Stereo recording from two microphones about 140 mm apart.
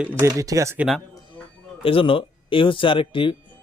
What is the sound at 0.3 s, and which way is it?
Speech, 25° right (ahead or behind).